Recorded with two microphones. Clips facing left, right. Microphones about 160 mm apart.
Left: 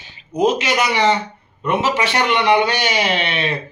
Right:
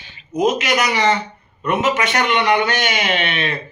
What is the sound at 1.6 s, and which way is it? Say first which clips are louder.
A man's voice: even; 30° left (ahead or behind).